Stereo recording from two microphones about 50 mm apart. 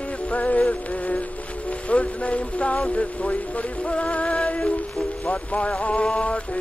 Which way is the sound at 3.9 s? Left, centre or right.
Left.